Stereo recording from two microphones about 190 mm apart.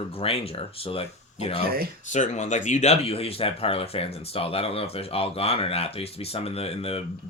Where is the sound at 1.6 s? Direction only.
50° right (ahead or behind).